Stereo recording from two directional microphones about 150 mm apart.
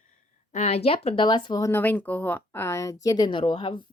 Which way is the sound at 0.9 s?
35° left (ahead or behind).